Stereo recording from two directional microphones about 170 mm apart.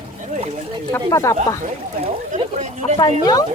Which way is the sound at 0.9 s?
15° left (ahead or behind).